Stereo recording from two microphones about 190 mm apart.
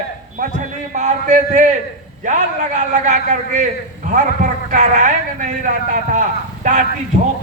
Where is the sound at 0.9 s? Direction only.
40° right (ahead or behind).